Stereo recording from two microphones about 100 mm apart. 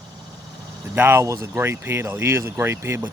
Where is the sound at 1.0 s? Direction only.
25° right (ahead or behind).